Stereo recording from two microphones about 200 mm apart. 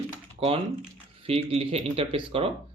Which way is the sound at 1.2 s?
30° right (ahead or behind).